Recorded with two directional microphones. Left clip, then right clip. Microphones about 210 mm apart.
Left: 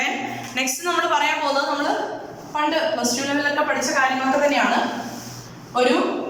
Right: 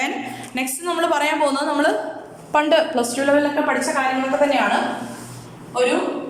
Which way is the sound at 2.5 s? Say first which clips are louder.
Right 4 dB; 50° right (ahead or behind).